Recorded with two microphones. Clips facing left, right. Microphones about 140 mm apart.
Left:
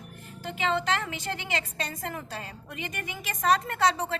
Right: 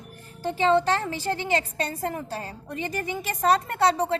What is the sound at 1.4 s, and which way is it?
A woman's voice, 30° right (ahead or behind).